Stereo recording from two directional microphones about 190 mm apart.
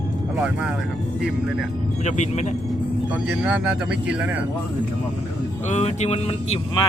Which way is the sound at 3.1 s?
5° right (ahead or behind).